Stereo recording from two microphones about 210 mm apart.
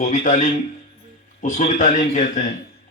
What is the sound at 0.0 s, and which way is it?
Speech, 35° left (ahead or behind).